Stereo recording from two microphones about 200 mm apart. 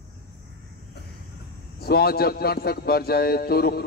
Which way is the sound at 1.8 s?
50° left (ahead or behind).